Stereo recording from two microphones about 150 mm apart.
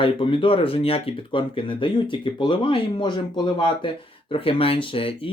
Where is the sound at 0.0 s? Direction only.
35° left (ahead or behind).